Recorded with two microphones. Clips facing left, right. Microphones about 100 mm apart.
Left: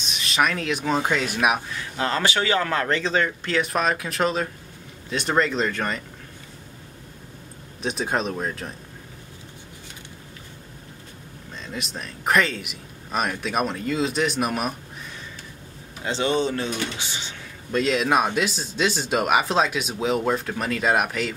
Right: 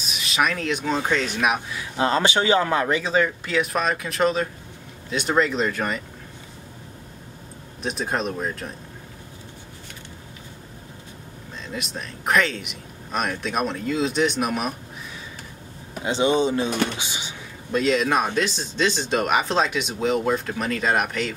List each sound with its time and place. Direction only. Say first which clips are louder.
0.0 s speech: even; centre (ahead or behind)
2.0 s speech: right 3 dB; 20° right (ahead or behind); by 6.0 s 5° right (ahead or behind)
7.8 s speech: left 1 dB; centre (ahead or behind)
11.6 s speech: right 1 dB; centre (ahead or behind)
16.0 s speech: right 3 dB; 15° right (ahead or behind)
17.0 s a sound: right 1 dB; 15° right (ahead or behind)
17.7 s speech: even; centre (ahead or behind)